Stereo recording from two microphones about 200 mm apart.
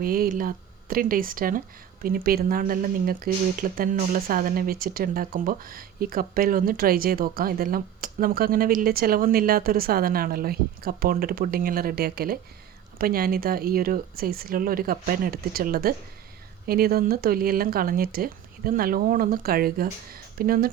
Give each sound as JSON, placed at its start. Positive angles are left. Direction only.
{"t": 0.0, "sound": "speech", "side_deg": -45}